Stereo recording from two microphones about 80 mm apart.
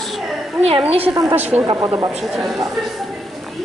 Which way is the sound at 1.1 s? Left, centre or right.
Right.